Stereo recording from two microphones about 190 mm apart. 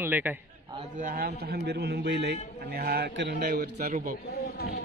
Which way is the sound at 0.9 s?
50° right (ahead or behind).